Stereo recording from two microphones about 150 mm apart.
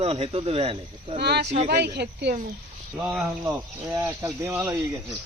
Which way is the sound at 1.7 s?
90° right.